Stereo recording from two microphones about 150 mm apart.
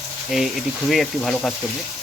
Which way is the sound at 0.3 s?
Centre (ahead or behind).